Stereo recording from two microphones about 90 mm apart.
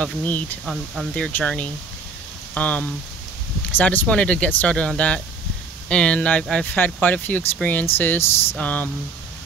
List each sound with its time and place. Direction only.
0.0 s speech: 15° left (ahead or behind)